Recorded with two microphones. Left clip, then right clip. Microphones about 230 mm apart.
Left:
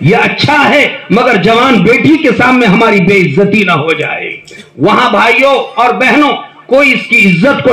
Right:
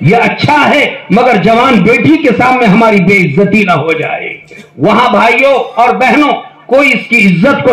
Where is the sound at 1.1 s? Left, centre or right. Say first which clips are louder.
Right 1 dB; left.